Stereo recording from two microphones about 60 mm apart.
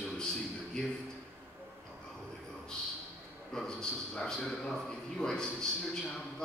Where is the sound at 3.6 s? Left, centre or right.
Centre.